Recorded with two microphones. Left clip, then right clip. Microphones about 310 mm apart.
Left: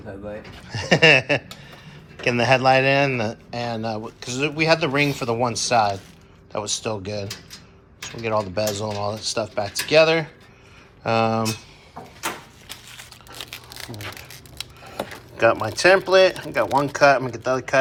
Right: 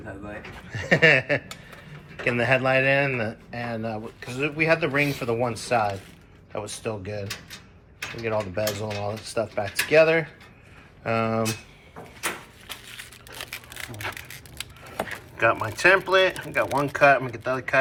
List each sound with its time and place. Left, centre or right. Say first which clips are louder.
0.3 s speech: left 3 dB; centre
12.6 s a sound: even; centre
15.4 s speech: left 4 dB; centre